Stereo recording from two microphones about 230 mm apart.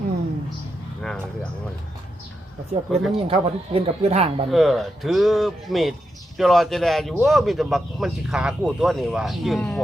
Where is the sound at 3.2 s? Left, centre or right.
Right.